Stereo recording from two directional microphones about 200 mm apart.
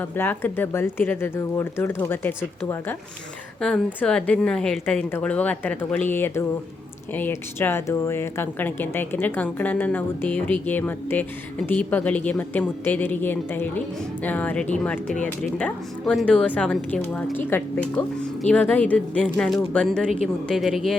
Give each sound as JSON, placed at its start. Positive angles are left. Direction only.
{"t": 0.0, "sound": "speech", "side_deg": 10}